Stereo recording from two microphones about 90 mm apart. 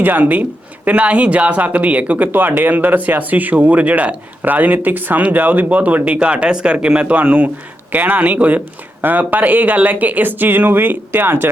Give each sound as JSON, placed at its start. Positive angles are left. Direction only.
{"t": 0.0, "sound": "speech", "side_deg": -20}